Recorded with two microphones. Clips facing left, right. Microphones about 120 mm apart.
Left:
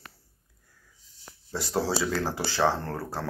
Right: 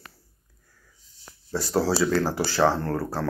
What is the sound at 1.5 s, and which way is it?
Speech, 20° left (ahead or behind).